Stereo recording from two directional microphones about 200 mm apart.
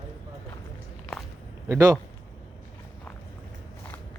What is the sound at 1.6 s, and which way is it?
Speech, 15° right (ahead or behind).